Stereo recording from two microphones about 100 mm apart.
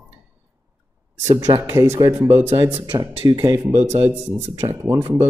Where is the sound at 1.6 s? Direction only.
25° right (ahead or behind).